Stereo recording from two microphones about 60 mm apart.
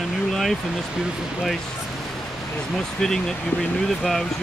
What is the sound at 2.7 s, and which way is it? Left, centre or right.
Speech, centre.